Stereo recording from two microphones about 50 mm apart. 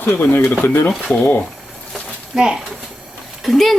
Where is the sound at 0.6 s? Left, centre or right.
Left.